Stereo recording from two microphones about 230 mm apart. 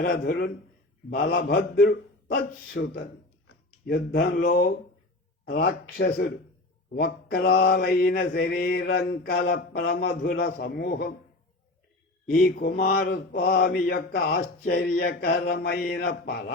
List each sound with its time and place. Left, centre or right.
0.0 s mantra: left
12.3 s mantra: left